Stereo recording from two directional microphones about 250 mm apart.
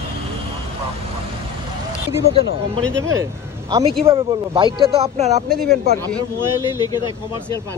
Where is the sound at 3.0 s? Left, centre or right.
Centre.